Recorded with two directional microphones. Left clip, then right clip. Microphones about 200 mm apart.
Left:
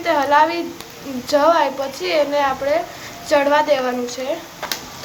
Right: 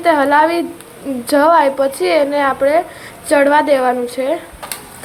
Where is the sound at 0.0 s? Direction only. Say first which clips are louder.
Right 4 dB; 30° right (ahead or behind).